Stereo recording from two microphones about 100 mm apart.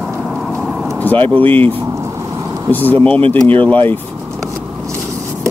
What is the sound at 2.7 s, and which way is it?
Speech, 20° left (ahead or behind).